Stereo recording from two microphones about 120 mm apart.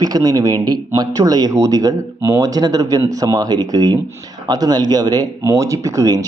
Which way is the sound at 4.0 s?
20° right (ahead or behind).